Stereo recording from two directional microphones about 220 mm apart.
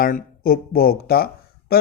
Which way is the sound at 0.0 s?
40° left (ahead or behind).